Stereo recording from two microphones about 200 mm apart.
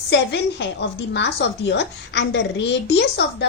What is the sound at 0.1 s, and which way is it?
A woman's voice, 60° left (ahead or behind).